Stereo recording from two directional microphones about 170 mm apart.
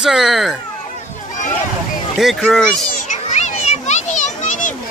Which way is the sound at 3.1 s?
45° left (ahead or behind).